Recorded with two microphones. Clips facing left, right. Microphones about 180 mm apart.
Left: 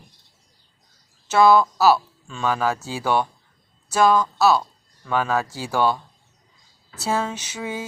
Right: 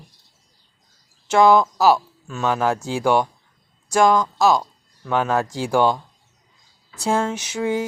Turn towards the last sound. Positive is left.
turn(degrees=-15)  # may be behind; listen again after turning